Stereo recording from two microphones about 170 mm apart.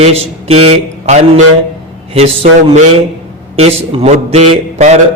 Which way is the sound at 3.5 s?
35° right (ahead or behind).